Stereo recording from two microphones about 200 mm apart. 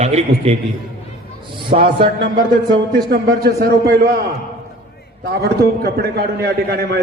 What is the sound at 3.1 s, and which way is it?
A man's voice, 50° right (ahead or behind).